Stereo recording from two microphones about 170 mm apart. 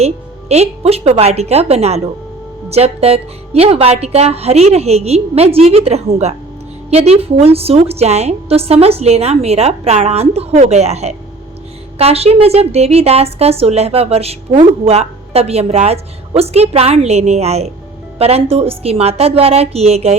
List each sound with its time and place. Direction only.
0.0 s a woman's voice: 40° right (ahead or behind)